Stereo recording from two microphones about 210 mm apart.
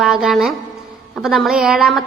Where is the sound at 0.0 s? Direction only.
Centre (ahead or behind).